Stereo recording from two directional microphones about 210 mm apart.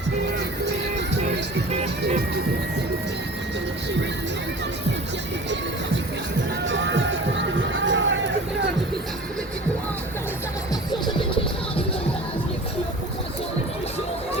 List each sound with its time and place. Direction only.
6.7 s music: 60° right (ahead or behind)